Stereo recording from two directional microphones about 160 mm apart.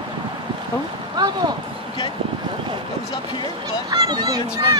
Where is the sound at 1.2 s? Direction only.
25° right (ahead or behind).